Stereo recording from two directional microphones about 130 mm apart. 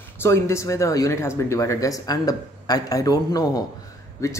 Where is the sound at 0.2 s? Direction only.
20° left (ahead or behind).